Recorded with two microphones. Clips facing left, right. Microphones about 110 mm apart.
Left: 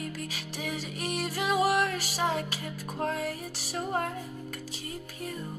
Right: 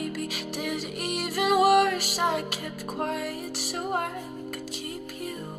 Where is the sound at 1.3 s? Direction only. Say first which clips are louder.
Right 7 dB; 60° right (ahead or behind).